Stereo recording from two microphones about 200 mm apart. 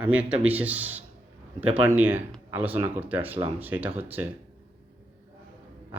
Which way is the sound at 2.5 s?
10° right (ahead or behind).